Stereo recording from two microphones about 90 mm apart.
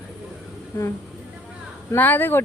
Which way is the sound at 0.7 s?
30° left (ahead or behind).